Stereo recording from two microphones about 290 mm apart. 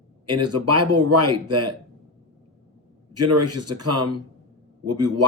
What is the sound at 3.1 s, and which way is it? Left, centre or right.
Speech, right.